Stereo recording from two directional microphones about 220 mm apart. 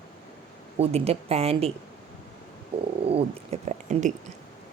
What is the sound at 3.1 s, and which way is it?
Speech, 30° right (ahead or behind).